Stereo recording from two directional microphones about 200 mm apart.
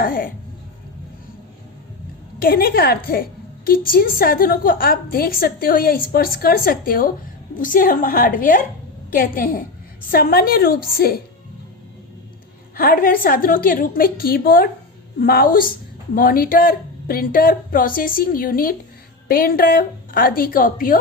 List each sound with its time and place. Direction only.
0.0 s a woman's voice: 45° left (ahead or behind)
2.4 s a woman's voice: 50° left (ahead or behind)
12.7 s a woman's voice: 45° left (ahead or behind)